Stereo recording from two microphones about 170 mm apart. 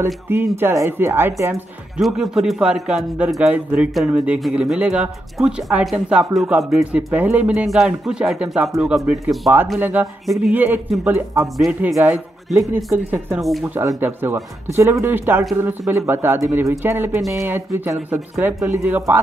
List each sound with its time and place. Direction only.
0.0 s speech: 15° right (ahead or behind)
2.0 s a man's voice: centre (ahead or behind)
10.2 s a man's voice: centre (ahead or behind)
10.5 s a man's voice: 10° right (ahead or behind)
12.4 s speech: 10° right (ahead or behind)
13.4 s a man's voice: centre (ahead or behind)
13.7 s speech: 15° right (ahead or behind)
17.2 s a man's voice: centre (ahead or behind)
17.5 s speech: 10° right (ahead or behind)